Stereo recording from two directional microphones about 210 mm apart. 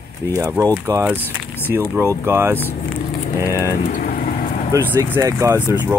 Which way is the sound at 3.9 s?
40° left (ahead or behind).